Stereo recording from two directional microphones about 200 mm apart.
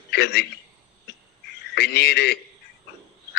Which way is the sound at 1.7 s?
55° left (ahead or behind).